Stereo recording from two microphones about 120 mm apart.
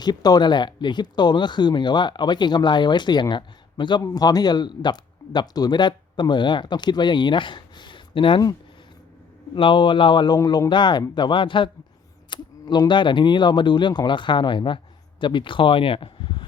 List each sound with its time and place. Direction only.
0.0 s speech: 35° left (ahead or behind)
9.6 s speech: 45° left (ahead or behind)
12.3 s computer keyboard: 40° left (ahead or behind)
12.9 s speech: 40° left (ahead or behind)